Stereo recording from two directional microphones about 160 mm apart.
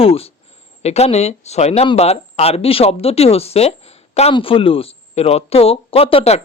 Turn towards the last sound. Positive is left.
turn(degrees=40)  # may be behind; listen again after turning